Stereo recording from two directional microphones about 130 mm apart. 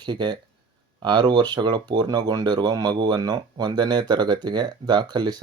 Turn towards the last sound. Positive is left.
turn(degrees=-35)  # may be behind; listen again after turning